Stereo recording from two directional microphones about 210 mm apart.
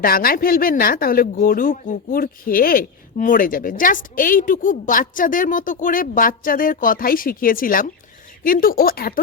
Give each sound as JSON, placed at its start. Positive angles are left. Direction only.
{"t": 0.0, "sound": "speech", "side_deg": 45}